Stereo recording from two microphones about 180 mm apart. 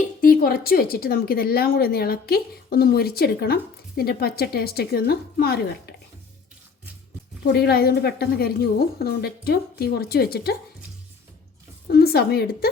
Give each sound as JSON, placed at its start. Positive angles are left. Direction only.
{"t": 0.2, "sound": "a woman's voice", "side_deg": 55}
{"t": 7.4, "sound": "a woman's voice", "side_deg": 60}
{"t": 11.9, "sound": "a woman's voice", "side_deg": 60}